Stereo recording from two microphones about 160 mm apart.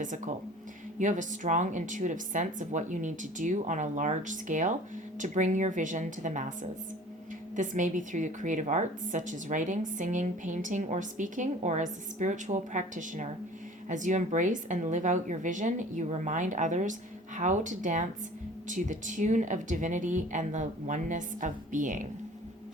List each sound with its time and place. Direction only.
0.9 s a woman's voice: 50° right (ahead or behind)